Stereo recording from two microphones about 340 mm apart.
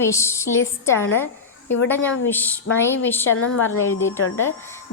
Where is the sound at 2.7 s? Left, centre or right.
Left.